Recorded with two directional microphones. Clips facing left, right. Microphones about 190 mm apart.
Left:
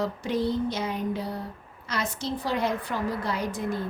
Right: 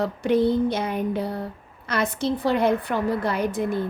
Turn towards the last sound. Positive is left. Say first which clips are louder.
# right 5 dB
turn(degrees=-60)  # may be behind; listen again after turning